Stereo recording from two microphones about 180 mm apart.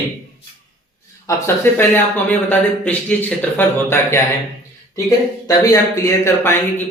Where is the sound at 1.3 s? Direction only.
15° left (ahead or behind).